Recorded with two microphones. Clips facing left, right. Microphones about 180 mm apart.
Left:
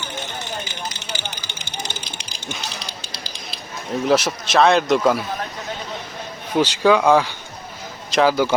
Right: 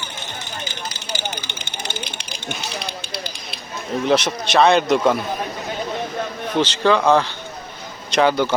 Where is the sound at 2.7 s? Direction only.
60° right (ahead or behind).